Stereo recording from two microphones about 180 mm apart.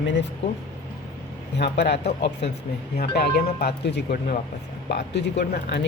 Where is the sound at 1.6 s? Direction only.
70° left (ahead or behind).